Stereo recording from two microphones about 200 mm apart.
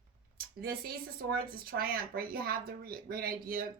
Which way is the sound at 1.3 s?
50° right (ahead or behind).